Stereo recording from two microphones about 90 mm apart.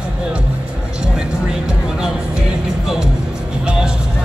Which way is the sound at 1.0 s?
10° right (ahead or behind).